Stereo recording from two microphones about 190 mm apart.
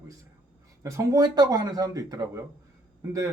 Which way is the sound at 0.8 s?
15° right (ahead or behind).